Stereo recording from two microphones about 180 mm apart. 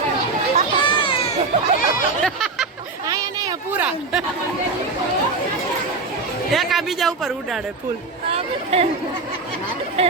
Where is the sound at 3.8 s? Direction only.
5° right (ahead or behind).